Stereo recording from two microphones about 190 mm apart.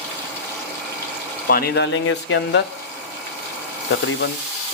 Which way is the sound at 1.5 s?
55° left (ahead or behind).